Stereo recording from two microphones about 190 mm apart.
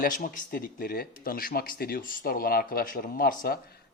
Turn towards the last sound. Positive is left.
turn(degrees=50)  # may be behind; listen again after turning